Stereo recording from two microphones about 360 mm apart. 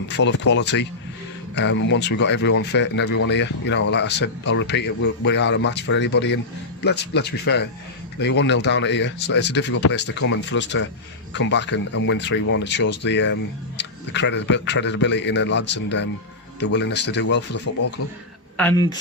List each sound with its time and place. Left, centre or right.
0.2 s speech: left
18.5 s speech: centre